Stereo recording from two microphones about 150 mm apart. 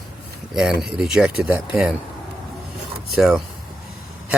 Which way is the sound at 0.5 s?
5° right (ahead or behind).